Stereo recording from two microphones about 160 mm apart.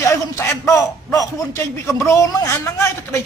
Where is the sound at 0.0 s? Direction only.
15° left (ahead or behind).